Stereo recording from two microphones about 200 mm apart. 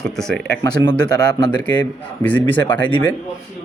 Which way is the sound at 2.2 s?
10° left (ahead or behind).